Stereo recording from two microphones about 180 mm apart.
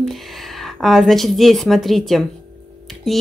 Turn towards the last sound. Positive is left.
turn(degrees=0)  # may be behind; listen again after turning